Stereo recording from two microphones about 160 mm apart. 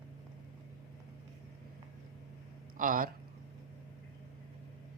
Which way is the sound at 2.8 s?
60° right (ahead or behind).